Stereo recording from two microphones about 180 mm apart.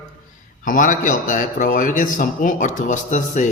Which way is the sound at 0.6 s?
50° left (ahead or behind).